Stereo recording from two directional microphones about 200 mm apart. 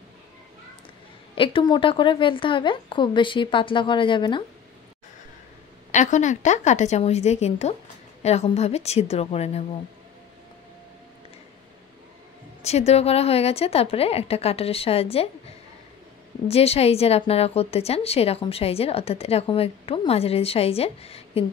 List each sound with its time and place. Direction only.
1.3 s a woman's voice: 25° left (ahead or behind)
5.9 s a woman's voice: 40° left (ahead or behind)
12.6 s a woman's voice: 30° left (ahead or behind)
16.4 s a woman's voice: 30° left (ahead or behind)